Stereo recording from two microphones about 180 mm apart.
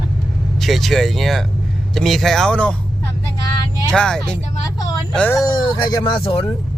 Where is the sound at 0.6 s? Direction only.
Centre (ahead or behind).